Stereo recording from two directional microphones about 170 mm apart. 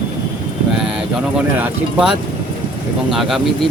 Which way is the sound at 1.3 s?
10° right (ahead or behind).